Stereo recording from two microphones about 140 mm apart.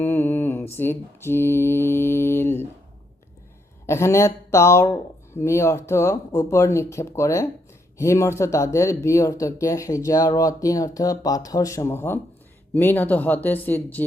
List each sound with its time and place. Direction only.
0.0 s mantra: 15° left (ahead or behind)
3.8 s speech: 20° left (ahead or behind)
12.7 s mantra: 15° left (ahead or behind)